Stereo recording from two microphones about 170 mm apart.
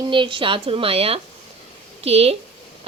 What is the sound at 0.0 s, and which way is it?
A woman's voice, 30° right (ahead or behind).